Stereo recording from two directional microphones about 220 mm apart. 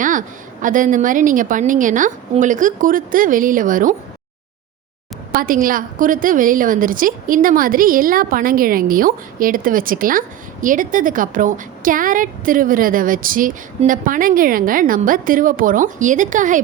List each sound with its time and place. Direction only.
0.0 s a woman's voice: 35° right (ahead or behind)
5.3 s a woman's voice: 40° right (ahead or behind)